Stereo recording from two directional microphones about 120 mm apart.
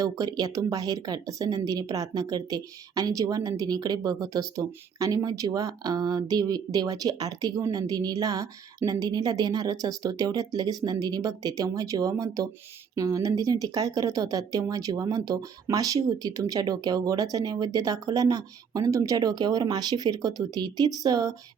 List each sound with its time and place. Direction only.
0.0 s speech: 30° right (ahead or behind)